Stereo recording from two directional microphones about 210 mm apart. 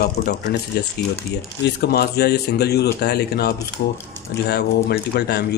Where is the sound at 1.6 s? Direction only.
50° left (ahead or behind).